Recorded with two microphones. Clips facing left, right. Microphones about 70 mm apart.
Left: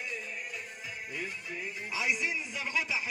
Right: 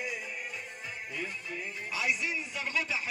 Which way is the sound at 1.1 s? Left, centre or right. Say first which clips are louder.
Right 1 dB; centre.